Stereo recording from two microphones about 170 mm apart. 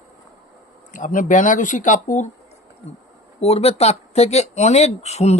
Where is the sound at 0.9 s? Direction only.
50° left (ahead or behind).